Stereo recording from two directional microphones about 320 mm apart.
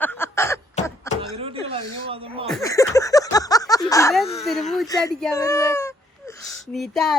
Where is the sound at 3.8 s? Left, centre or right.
Centre.